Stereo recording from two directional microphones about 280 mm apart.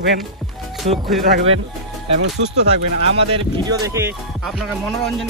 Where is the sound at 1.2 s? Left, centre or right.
Right.